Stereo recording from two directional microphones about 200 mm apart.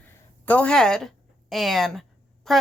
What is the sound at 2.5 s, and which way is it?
Speech, centre (ahead or behind).